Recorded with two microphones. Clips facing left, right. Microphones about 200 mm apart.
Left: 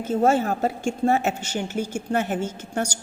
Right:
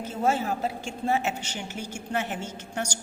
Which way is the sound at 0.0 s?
50° left (ahead or behind).